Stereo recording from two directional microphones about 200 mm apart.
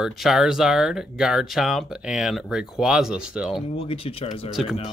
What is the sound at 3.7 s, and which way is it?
Speech, 30° left (ahead or behind).